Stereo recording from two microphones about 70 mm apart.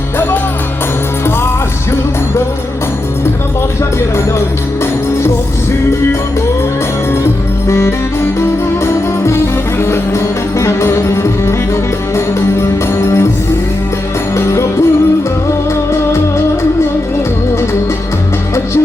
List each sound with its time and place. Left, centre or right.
7.7 s music: left
14.3 s music: left